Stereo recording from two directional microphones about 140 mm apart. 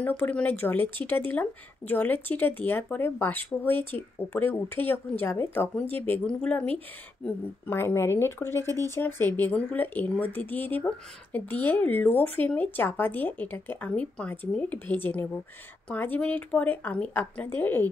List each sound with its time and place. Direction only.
0.0 s speech: 10° left (ahead or behind)